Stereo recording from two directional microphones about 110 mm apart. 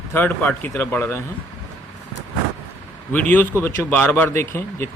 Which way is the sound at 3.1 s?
15° left (ahead or behind).